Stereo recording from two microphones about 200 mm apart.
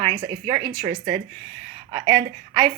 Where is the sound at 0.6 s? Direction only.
20° right (ahead or behind).